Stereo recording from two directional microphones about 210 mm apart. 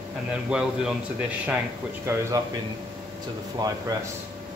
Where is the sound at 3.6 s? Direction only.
15° right (ahead or behind).